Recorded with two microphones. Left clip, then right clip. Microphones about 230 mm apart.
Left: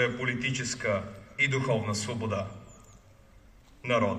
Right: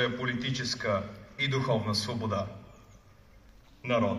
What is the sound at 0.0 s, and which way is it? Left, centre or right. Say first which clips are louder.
A man's voice: left 2 dB; centre.